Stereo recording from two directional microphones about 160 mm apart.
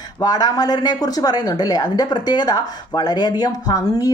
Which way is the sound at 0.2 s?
25° left (ahead or behind).